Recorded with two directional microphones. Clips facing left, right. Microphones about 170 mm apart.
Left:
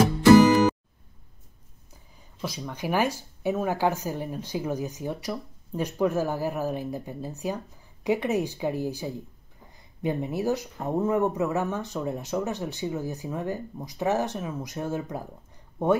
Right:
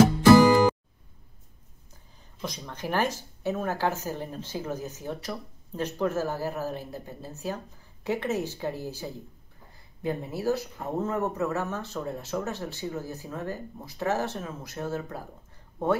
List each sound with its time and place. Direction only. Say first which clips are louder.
2.4 s speech: left 3 dB; 5° left (ahead or behind)